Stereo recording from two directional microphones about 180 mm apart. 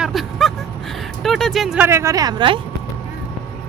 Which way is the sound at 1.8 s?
15° right (ahead or behind).